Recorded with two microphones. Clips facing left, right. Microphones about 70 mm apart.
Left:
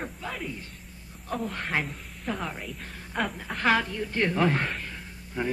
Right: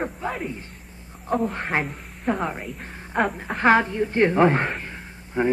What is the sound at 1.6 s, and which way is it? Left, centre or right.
Speech, right.